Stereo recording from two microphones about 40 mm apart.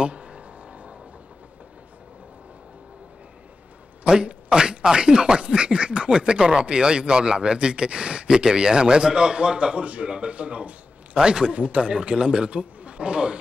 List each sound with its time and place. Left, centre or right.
0.0 s a sound: right
4.0 s speech: right
11.1 s speech: centre